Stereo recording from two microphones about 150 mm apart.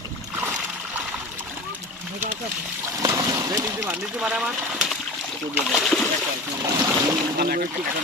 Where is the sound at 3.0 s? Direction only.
25° right (ahead or behind).